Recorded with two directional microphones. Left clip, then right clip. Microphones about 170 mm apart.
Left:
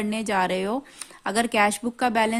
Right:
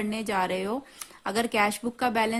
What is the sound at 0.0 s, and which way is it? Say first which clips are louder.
A woman's voice: left 4 dB; 25° left (ahead or behind).